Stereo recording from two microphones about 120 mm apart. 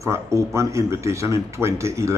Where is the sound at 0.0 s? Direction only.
25° right (ahead or behind).